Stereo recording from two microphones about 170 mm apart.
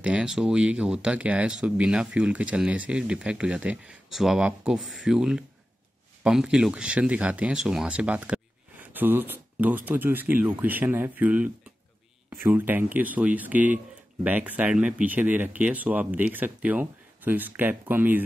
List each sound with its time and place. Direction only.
0.0 s speech: 5° right (ahead or behind)